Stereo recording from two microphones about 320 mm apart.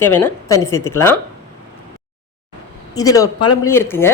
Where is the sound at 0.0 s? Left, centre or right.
Centre.